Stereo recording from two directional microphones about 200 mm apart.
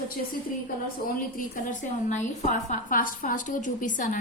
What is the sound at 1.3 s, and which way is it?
A woman's voice, 40° left (ahead or behind).